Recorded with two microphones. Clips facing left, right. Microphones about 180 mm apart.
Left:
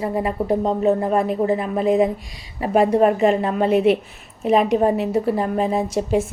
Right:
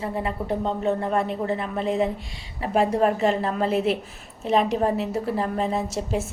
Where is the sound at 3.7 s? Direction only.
35° right (ahead or behind).